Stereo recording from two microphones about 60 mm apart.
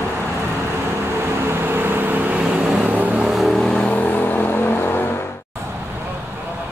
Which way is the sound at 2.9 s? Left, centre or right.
Right.